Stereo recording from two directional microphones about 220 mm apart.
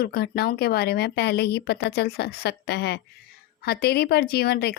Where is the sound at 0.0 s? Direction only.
45° left (ahead or behind).